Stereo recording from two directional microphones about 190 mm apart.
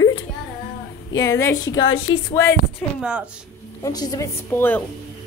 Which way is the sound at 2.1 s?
90° left.